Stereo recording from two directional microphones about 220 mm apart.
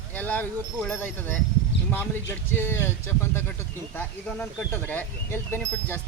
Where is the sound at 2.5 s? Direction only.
10° left (ahead or behind).